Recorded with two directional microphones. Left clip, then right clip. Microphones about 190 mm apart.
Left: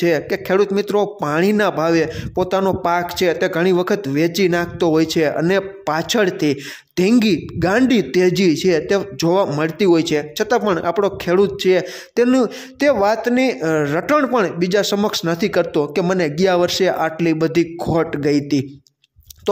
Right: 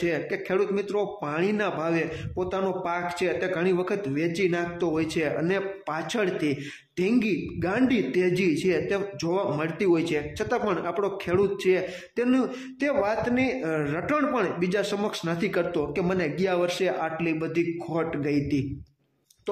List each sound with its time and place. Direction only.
0.0 s speech: 40° left (ahead or behind)